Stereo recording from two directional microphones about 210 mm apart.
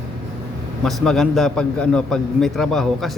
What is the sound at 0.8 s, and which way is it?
Speech, centre (ahead or behind).